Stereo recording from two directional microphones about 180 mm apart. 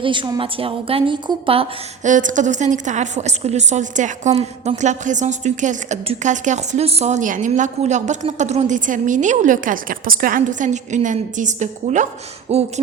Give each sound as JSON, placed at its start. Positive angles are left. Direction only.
{"t": 0.0, "sound": "a woman's voice", "side_deg": -25}
{"t": 2.0, "sound": "a woman's voice", "side_deg": -45}